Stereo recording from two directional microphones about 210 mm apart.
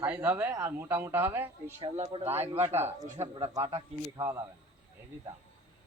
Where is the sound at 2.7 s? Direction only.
10° right (ahead or behind).